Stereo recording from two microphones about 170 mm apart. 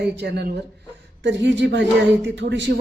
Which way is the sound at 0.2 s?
80° right.